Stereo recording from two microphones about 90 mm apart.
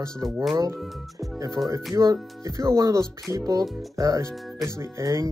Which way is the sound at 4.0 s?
35° right (ahead or behind).